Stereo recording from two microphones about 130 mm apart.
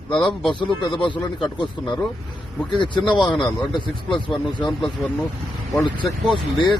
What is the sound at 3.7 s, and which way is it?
Speech, 40° left (ahead or behind).